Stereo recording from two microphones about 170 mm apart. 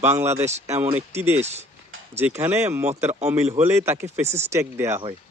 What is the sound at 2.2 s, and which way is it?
Speech, 10° right (ahead or behind).